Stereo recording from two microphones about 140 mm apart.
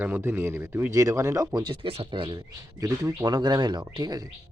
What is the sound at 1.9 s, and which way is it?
Speech, 40° right (ahead or behind).